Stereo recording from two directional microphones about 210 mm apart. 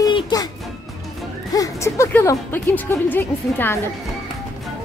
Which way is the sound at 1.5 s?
15° left (ahead or behind).